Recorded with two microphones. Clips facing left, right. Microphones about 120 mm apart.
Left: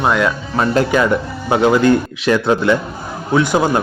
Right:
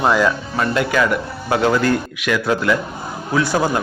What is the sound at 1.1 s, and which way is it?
A man's voice, 25° left (ahead or behind).